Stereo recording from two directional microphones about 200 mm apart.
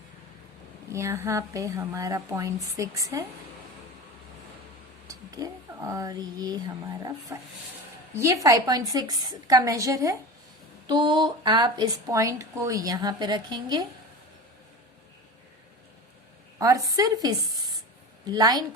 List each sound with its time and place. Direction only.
0.9 s a woman's voice: 15° right (ahead or behind)
5.0 s a woman's voice: 15° right (ahead or behind)
16.6 s a woman's voice: 20° right (ahead or behind)